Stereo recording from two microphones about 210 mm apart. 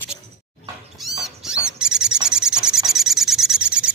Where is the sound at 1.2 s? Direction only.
5° right (ahead or behind).